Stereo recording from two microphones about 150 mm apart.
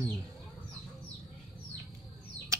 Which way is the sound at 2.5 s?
20° right (ahead or behind).